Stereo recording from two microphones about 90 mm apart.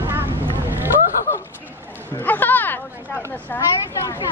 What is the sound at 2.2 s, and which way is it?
Speech, 20° left (ahead or behind).